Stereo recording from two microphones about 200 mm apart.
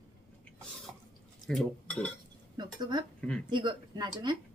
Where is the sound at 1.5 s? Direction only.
5° left (ahead or behind).